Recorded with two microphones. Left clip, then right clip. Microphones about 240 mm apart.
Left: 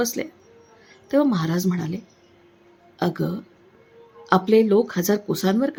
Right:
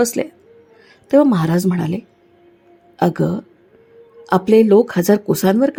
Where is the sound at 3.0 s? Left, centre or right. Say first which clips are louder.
Right 8 dB; right.